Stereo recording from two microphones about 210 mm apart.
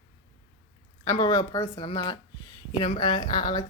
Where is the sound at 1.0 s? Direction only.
20° left (ahead or behind).